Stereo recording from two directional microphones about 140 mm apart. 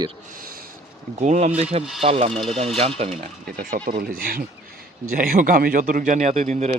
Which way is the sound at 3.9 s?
90° right.